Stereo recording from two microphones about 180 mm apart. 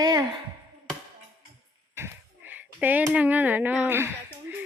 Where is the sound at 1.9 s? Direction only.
10° right (ahead or behind).